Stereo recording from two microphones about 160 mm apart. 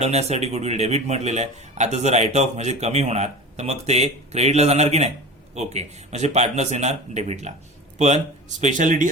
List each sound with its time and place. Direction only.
0.0 s speech: 40° right (ahead or behind)